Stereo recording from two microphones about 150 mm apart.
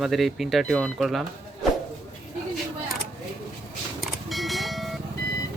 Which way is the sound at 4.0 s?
Centre (ahead or behind).